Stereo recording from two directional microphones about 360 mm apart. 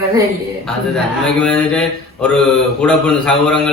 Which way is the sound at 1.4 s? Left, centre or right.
Centre.